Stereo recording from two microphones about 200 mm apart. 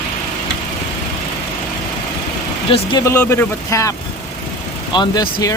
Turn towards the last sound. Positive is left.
turn(degrees=20)  # may be behind; listen again after turning